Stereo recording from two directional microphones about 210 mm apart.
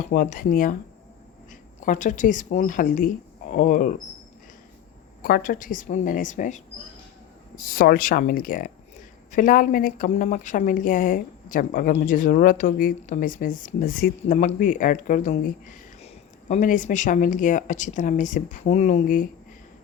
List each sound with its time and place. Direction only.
0.1 s a woman's voice: 40° left (ahead or behind)
1.8 s a woman's voice: 40° left (ahead or behind)
5.2 s a woman's voice: 45° left (ahead or behind)